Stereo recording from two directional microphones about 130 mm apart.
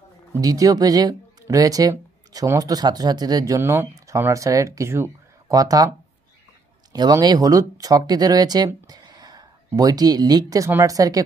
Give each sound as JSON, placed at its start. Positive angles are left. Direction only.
{"t": 0.4, "sound": "speech", "side_deg": -30}